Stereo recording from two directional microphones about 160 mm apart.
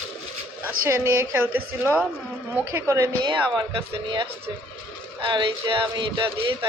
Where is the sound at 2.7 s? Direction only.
20° right (ahead or behind).